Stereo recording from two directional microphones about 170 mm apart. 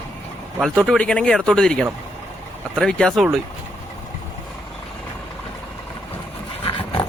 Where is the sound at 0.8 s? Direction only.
5° left (ahead or behind).